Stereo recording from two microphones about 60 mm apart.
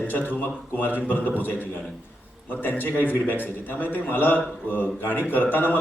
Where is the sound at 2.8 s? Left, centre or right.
Left.